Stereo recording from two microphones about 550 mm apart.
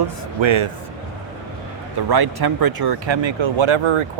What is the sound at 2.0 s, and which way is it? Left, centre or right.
Speech, right.